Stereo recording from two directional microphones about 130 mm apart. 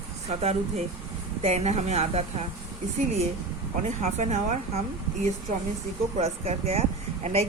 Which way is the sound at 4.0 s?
65° right (ahead or behind).